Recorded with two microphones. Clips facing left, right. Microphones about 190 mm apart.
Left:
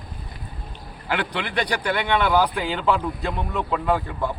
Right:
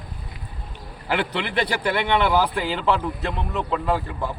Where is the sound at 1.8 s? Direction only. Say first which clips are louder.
Right 1 dB; 5° right (ahead or behind).